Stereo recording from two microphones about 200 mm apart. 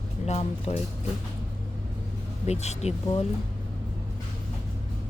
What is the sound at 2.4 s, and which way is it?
Speech, 35° left (ahead or behind).